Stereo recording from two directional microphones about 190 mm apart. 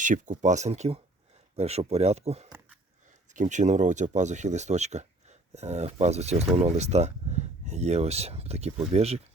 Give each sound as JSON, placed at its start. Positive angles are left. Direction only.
{"t": 0.0, "sound": "speech", "side_deg": -40}